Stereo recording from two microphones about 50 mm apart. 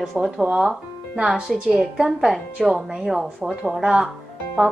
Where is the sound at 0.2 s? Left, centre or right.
Centre.